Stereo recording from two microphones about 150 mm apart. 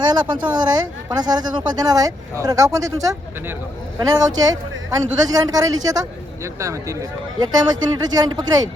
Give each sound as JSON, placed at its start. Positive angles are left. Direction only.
{"t": 0.0, "sound": "speech", "side_deg": -30}